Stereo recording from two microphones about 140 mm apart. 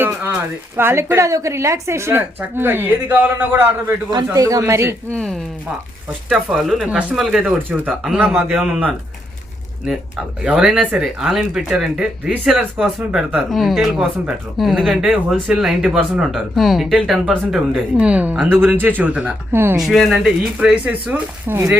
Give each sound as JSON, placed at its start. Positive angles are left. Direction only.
{"t": 0.0, "sound": "speech", "side_deg": -15}
{"t": 4.1, "sound": "speech", "side_deg": -25}
{"t": 5.1, "sound": "speech", "side_deg": 0}
{"t": 10.4, "sound": "speech", "side_deg": -5}
{"t": 19.8, "sound": "speech", "side_deg": 0}